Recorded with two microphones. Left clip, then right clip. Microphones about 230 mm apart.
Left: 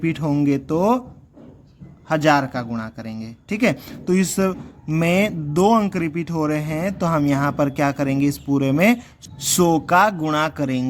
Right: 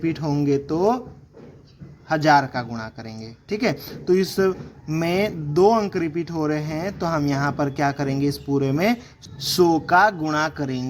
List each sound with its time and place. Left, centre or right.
0.0 s a man's voice: left
2.0 s a man's voice: left